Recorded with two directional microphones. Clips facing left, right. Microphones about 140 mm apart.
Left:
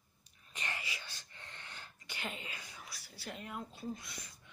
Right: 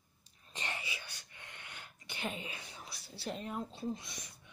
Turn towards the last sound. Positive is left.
turn(degrees=-20)  # may be behind; listen again after turning